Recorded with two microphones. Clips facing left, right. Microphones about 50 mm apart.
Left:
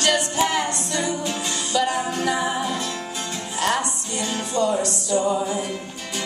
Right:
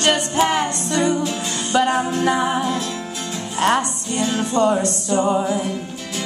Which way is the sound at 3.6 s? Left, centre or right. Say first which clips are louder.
Right 5 dB; right.